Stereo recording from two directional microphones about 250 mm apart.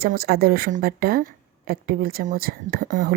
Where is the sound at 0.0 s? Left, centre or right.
Right.